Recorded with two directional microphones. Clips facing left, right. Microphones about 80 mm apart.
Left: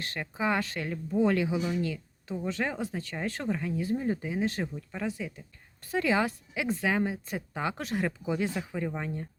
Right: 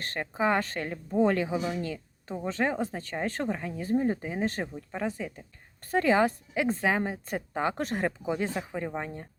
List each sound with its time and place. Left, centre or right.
0.0 s speech: right
4.6 s speech: right
5.0 s speech: right
7.3 s speech: right